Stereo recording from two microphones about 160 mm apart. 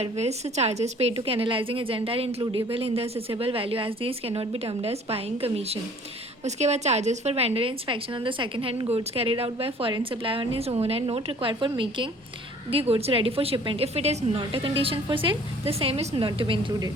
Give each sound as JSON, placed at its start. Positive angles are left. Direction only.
{"t": 0.0, "sound": "a woman's voice", "side_deg": -40}